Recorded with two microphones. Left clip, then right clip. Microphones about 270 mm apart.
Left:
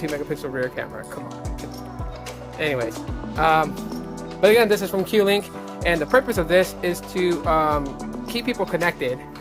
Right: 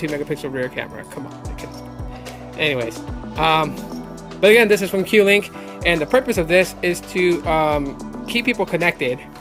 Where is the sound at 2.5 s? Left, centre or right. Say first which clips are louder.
Right 3 dB; right.